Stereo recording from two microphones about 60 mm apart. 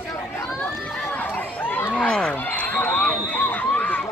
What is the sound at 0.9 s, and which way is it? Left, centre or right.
Chatter, left.